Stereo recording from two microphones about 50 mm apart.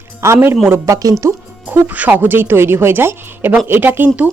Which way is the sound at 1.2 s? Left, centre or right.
Right.